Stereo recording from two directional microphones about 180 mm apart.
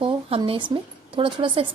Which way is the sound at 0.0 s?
30° right (ahead or behind).